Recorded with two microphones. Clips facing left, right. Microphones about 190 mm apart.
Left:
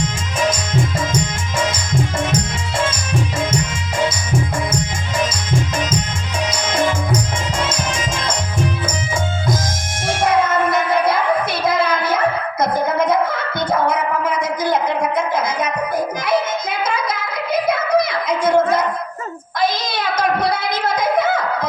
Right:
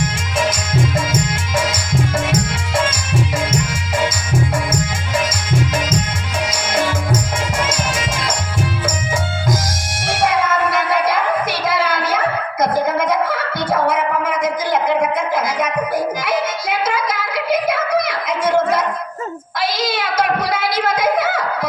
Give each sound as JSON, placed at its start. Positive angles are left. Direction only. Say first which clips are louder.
{"t": 0.3, "sound": "music", "louder": "even", "side_deg": -90}
{"t": 7.7, "sound": "music", "louder": "right 1 dB", "side_deg": -90}
{"t": 19.8, "sound": "child singing", "louder": "right 1 dB", "side_deg": -90}